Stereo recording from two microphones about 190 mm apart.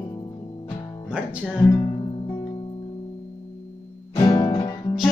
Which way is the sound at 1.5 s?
15° left (ahead or behind).